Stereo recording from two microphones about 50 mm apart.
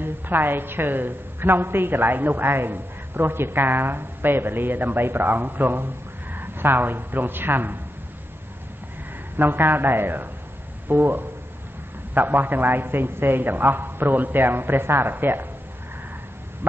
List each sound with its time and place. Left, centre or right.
0.0 s a woman's voice: right
9.4 s a woman's voice: right